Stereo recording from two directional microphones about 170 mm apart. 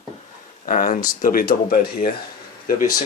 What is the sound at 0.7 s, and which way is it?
Speech, 55° left (ahead or behind).